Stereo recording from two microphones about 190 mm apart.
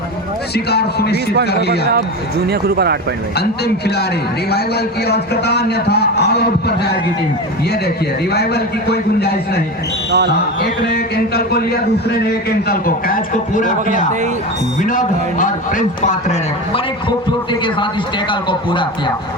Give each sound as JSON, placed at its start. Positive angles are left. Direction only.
{"t": 0.5, "sound": "a man's voice", "side_deg": 60}
{"t": 2.5, "sound": "speech", "side_deg": -55}
{"t": 3.3, "sound": "a man's voice", "side_deg": 60}
{"t": 8.3, "sound": "a man's voice", "side_deg": 60}
{"t": 10.1, "sound": "speech", "side_deg": -65}
{"t": 10.6, "sound": "a man's voice", "side_deg": 55}
{"t": 14.8, "sound": "a man's voice", "side_deg": 45}
{"t": 17.1, "sound": "speech", "side_deg": 25}